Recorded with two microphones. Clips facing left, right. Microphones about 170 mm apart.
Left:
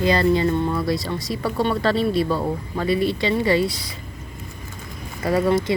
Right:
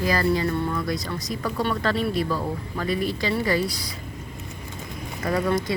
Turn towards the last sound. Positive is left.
turn(degrees=25)  # may be behind; listen again after turning